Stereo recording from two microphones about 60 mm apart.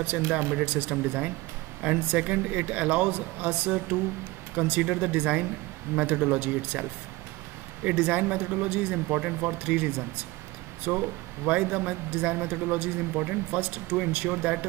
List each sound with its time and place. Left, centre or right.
0.3 s speech: right